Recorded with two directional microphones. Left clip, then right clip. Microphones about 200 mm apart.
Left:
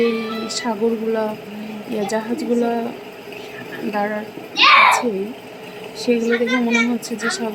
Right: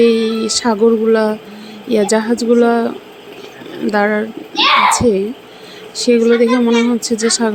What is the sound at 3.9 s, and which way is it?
Speech, 35° right (ahead or behind).